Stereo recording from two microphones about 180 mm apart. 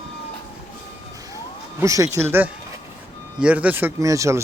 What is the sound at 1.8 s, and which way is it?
Speech, 15° right (ahead or behind).